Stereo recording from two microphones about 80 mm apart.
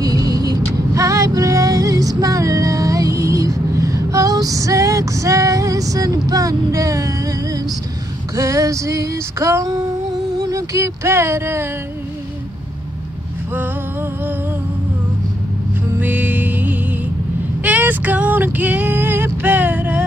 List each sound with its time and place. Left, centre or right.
0.0 s vehicle: right
8.4 s female singing: right
16.0 s music: right
17.6 s female singing: right